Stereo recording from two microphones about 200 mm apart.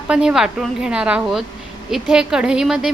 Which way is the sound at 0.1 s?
5° right (ahead or behind).